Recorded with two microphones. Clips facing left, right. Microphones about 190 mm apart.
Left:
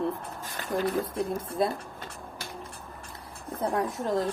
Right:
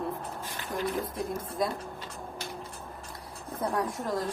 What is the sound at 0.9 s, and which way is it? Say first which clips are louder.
Speech: left 3 dB; 30° left (ahead or behind).